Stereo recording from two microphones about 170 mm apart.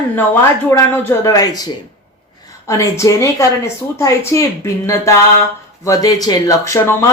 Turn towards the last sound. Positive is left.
turn(degrees=15)  # may be behind; listen again after turning